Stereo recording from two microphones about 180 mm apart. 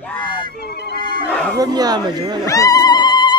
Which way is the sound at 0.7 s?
65° left (ahead or behind).